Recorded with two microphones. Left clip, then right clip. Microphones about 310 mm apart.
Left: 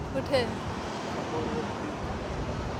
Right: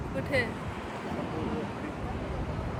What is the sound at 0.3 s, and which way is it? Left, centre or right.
Speech, centre.